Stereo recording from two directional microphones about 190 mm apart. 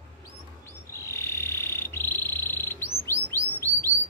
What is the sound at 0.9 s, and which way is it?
Frog, 15° left (ahead or behind).